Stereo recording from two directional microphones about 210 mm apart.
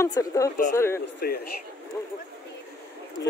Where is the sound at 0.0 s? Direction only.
15° left (ahead or behind).